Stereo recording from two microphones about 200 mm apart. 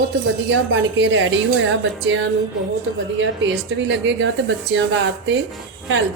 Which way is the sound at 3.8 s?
65° right (ahead or behind).